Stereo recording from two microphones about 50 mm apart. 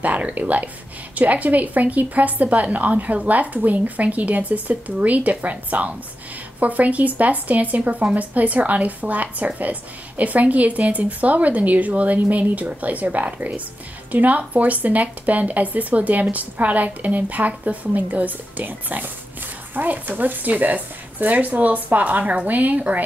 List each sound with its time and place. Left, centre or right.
0.0 s speech: right